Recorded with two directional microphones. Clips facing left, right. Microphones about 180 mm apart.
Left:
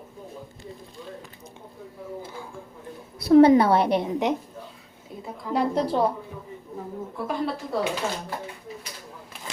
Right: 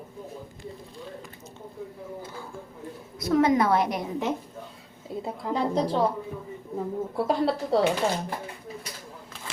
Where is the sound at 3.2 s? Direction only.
30° left (ahead or behind).